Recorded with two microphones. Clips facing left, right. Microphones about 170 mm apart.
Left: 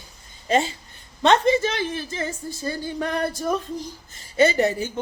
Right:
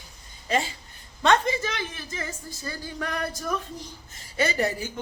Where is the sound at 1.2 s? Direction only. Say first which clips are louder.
Left 5 dB; 25° left (ahead or behind).